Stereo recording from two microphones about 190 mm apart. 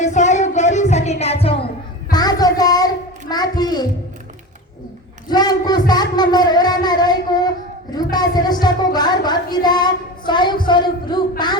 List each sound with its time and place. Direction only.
0.0 s music: 40° left (ahead or behind)
2.0 s child singing: 20° left (ahead or behind)
5.3 s speech: 20° left (ahead or behind)
7.9 s a sound: 20° left (ahead or behind)
8.6 s child singing: 20° left (ahead or behind)